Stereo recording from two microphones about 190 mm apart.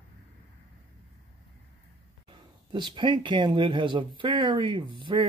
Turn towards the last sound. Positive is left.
turn(degrees=-25)  # may be behind; listen again after turning